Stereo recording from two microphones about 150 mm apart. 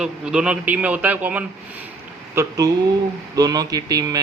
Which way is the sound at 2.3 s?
20° right (ahead or behind).